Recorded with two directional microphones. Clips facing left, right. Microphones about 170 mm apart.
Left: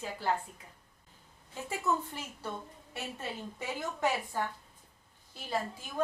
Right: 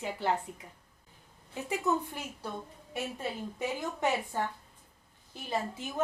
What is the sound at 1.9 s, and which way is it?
Speech, 20° right (ahead or behind).